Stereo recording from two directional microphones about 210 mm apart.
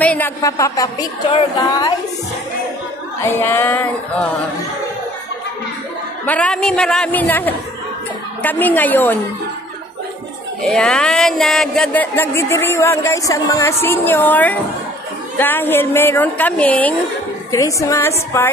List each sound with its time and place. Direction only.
0.0 s speech: 10° left (ahead or behind)
3.2 s speech: 10° left (ahead or behind)
6.2 s speech: 5° left (ahead or behind)
10.6 s speech: 5° left (ahead or behind)